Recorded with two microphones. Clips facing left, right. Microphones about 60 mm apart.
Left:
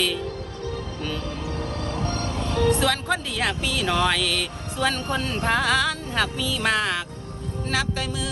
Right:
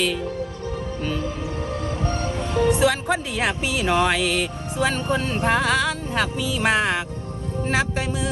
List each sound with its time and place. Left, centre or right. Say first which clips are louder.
0.0 s speech: right 3 dB; centre
6.3 s speech: right 3 dB; centre